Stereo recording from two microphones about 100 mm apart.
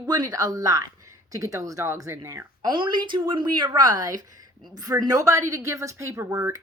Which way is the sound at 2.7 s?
50° right (ahead or behind).